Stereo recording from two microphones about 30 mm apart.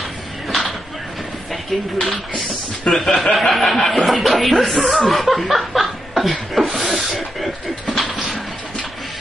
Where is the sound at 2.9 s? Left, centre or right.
Centre.